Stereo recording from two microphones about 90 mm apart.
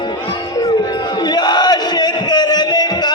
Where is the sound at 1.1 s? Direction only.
55° left (ahead or behind).